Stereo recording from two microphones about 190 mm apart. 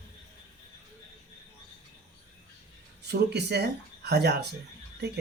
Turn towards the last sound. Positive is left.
turn(degrees=-60)  # may be behind; listen again after turning